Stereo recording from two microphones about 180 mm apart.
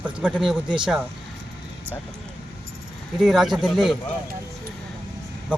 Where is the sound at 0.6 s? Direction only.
25° right (ahead or behind).